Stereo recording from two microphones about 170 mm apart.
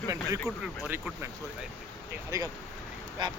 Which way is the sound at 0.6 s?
10° right (ahead or behind).